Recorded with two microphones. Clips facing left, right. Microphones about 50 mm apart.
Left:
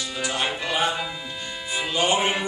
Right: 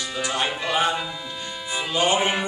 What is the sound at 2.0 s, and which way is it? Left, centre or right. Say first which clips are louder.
Mantra: right 1 dB; right.